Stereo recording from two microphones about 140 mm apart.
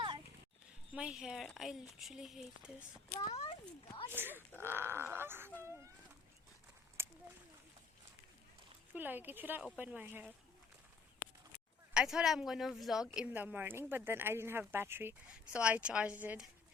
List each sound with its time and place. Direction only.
0.9 s speech: 5° right (ahead or behind)
3.1 s a child's voice: 30° left (ahead or behind)
4.1 s speech: 15° right (ahead or behind)
5.6 s a sound: 20° right (ahead or behind)
7.0 s a sound: 15° right (ahead or behind)
8.9 s speech: 15° right (ahead or behind)
11.9 s speech: 5° right (ahead or behind)